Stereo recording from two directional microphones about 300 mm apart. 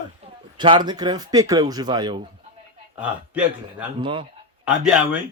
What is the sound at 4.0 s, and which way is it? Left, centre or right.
Speech, centre.